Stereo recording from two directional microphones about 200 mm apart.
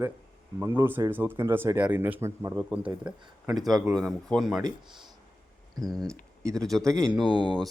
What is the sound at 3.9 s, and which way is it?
Speech, centre (ahead or behind).